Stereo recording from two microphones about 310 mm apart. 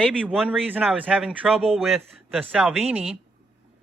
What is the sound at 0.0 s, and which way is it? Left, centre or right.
Speech, centre.